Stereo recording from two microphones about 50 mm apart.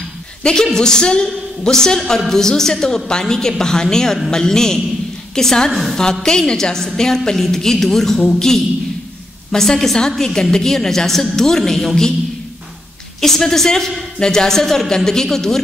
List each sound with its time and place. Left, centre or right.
0.4 s a woman's voice: centre
13.2 s a woman's voice: centre